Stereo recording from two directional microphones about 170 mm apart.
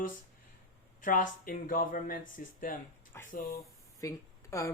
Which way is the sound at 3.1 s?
15° left (ahead or behind).